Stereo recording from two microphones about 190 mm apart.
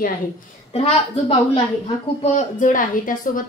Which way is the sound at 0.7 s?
35° left (ahead or behind).